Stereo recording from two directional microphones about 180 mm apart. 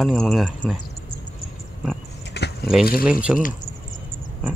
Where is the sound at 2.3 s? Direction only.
70° left (ahead or behind).